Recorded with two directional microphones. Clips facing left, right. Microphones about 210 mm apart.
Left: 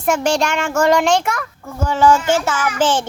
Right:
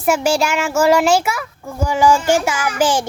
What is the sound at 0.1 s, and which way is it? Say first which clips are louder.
Speech: right 1 dB; 5° right (ahead or behind).